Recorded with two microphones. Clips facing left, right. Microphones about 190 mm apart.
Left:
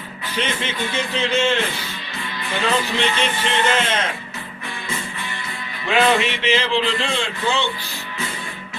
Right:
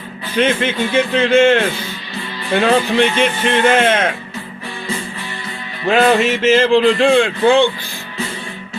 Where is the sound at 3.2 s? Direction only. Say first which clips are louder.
Right 6 dB; 55° right (ahead or behind).